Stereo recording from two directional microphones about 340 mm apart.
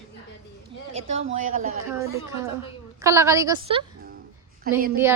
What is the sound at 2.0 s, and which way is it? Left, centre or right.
A woman's voice, centre.